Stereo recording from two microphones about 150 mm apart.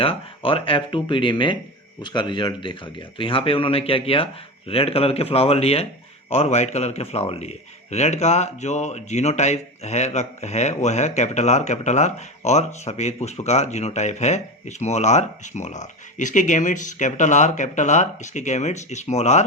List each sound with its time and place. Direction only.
0.0 s a man's voice: 40° left (ahead or behind)